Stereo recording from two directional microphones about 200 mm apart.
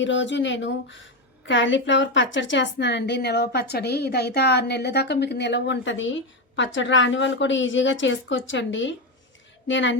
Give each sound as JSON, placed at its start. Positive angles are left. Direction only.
{"t": 0.0, "sound": "a woman's voice", "side_deg": 65}